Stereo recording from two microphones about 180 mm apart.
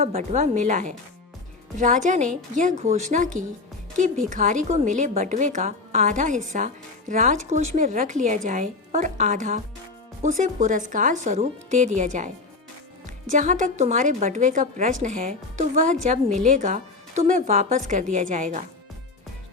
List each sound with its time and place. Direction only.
0.0 s a woman's voice: 40° right (ahead or behind)
13.3 s a woman's voice: 45° right (ahead or behind)